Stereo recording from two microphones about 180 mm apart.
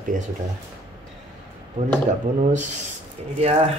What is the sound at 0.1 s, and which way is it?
Speech, 45° right (ahead or behind).